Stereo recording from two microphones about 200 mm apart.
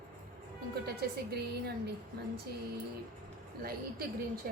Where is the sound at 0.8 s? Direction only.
50° right (ahead or behind).